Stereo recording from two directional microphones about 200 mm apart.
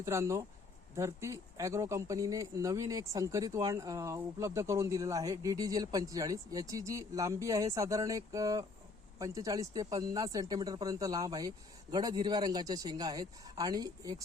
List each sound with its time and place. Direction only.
0.0 s speech: 15° right (ahead or behind)